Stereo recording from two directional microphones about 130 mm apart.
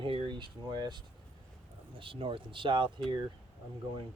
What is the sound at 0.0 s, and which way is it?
Speech, 40° right (ahead or behind).